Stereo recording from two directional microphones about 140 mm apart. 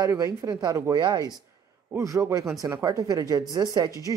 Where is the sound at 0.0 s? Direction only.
25° right (ahead or behind).